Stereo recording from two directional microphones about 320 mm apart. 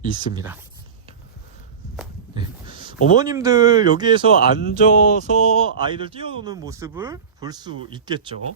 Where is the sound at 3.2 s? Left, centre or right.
Centre.